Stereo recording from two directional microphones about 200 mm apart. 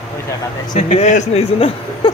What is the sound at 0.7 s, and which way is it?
A man's voice, 35° left (ahead or behind).